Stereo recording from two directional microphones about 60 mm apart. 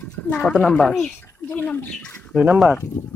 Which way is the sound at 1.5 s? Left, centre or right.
Left.